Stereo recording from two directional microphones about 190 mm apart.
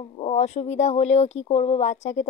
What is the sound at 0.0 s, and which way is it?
Speech, 35° left (ahead or behind).